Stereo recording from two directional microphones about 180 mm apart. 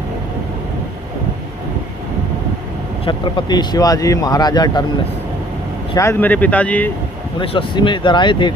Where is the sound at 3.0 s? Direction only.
25° left (ahead or behind).